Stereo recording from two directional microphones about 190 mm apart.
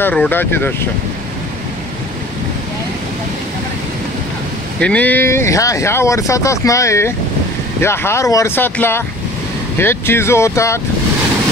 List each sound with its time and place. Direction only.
0.0 s speech: 10° left (ahead or behind)
4.7 s speech: 5° left (ahead or behind)